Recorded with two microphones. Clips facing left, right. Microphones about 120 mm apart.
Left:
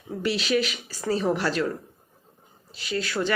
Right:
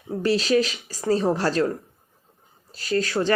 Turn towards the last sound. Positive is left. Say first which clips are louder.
# right 4 dB
turn(degrees=-40)  # may be behind; listen again after turning